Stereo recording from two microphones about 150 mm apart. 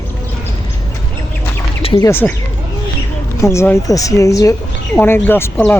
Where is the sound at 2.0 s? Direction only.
15° left (ahead or behind).